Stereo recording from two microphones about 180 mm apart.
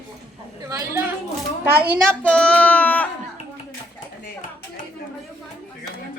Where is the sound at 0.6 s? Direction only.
20° right (ahead or behind).